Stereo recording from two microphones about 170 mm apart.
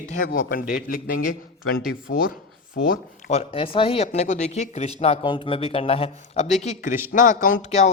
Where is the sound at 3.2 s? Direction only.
35° left (ahead or behind).